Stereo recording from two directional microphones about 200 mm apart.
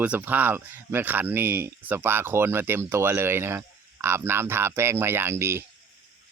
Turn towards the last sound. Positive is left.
turn(degrees=-10)  # may be behind; listen again after turning